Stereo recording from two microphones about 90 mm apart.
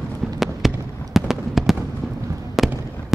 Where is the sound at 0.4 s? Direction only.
5° right (ahead or behind).